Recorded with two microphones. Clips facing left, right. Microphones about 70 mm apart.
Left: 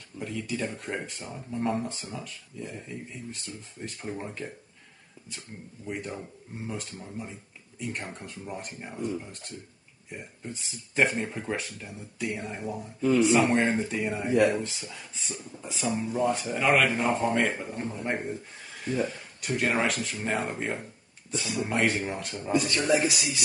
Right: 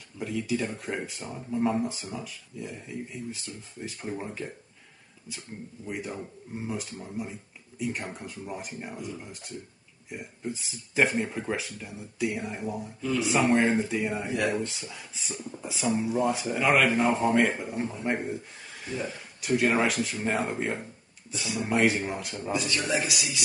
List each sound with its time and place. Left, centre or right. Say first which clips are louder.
0.2 s speech: right 3 dB; centre
5.9 s speech: even; centre
22.5 s a man's voice: left 4 dB; left